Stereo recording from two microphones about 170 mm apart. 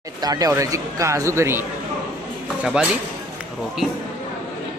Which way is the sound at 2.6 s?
5° right (ahead or behind).